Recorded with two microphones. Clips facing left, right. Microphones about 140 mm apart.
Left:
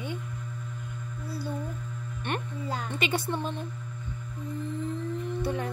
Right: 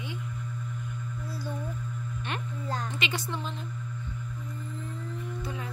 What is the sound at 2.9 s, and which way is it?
Speech, 50° left (ahead or behind).